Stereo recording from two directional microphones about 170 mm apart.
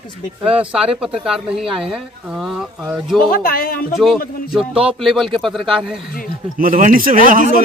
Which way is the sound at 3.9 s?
Centre (ahead or behind).